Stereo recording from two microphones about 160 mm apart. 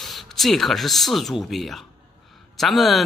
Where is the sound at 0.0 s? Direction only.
Centre (ahead or behind).